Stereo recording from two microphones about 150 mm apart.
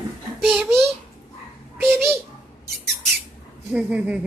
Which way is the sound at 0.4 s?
Centre (ahead or behind).